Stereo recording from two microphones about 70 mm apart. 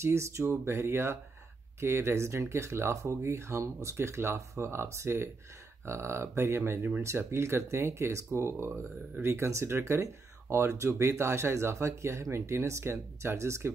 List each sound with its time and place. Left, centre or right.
0.0 s speech: right